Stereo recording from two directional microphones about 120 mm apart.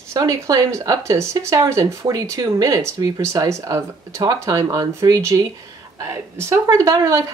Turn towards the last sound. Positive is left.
turn(degrees=-30)  # may be behind; listen again after turning